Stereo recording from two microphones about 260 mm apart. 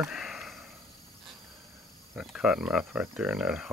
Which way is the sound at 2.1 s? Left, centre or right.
Centre.